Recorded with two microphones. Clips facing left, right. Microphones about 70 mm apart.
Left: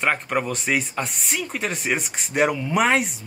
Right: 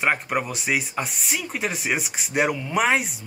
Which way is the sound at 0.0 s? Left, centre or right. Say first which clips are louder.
Left 1 dB; centre.